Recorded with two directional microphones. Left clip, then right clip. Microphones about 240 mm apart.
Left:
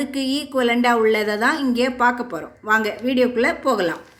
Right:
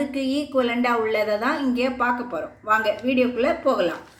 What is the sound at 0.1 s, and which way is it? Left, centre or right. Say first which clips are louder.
A woman's voice: left 1 dB; left.